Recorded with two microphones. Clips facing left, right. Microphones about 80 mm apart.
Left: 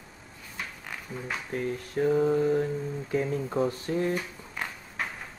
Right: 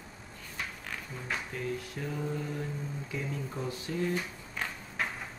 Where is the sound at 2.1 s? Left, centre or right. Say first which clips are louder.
Left 13 dB; left.